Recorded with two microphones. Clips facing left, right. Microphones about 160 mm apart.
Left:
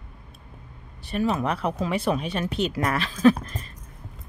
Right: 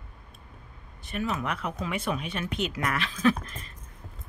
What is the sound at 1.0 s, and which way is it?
Speech, 35° left (ahead or behind).